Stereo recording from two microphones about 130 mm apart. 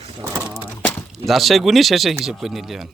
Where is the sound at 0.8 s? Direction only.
15° left (ahead or behind).